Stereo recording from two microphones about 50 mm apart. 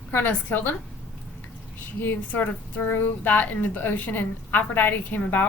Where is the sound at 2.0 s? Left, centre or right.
Left.